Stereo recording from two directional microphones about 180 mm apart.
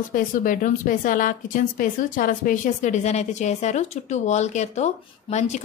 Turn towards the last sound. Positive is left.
turn(degrees=40)  # may be behind; listen again after turning